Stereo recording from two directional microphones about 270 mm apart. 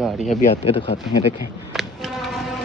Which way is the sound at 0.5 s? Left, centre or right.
Left.